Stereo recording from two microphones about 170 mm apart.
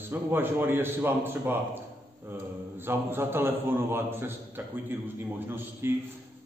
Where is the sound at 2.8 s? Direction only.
15° right (ahead or behind).